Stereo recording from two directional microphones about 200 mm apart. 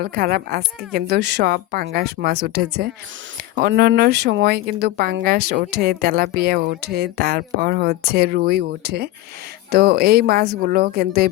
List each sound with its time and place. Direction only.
0.0 s speech: 50° right (ahead or behind)